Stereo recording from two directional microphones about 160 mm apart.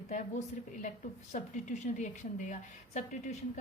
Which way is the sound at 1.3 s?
50° left (ahead or behind).